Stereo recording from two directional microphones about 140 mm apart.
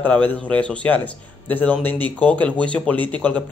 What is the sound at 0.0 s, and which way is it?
A man's voice, 10° left (ahead or behind).